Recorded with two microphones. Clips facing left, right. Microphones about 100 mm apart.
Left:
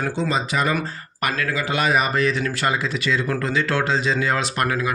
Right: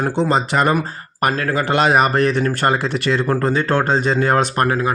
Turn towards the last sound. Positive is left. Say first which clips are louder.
# right 5 dB
turn(degrees=-35)  # may be behind; listen again after turning